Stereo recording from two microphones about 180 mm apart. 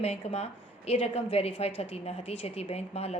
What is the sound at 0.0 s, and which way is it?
A woman's voice, 35° left (ahead or behind).